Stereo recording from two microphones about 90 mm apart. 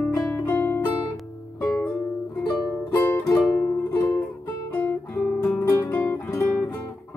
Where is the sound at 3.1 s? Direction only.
20° left (ahead or behind).